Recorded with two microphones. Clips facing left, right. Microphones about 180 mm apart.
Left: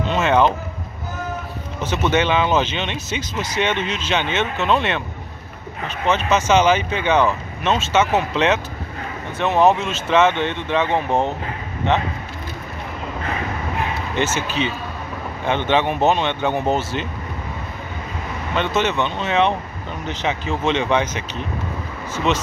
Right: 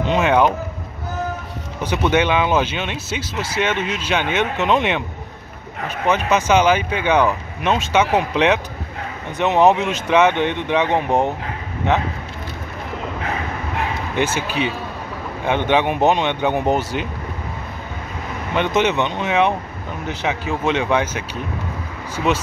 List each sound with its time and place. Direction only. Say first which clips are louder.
0.0 s speech: right 1 dB; 15° right (ahead or behind)
1.8 s speech: right 1 dB; 10° right (ahead or behind)
14.1 s speech: right 1 dB; 10° right (ahead or behind)
18.5 s speech: right 2 dB; 15° right (ahead or behind)